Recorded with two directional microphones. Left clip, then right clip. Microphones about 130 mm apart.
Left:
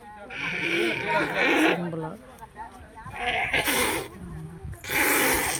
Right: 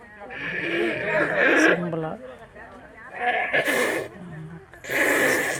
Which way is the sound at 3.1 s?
25° left (ahead or behind).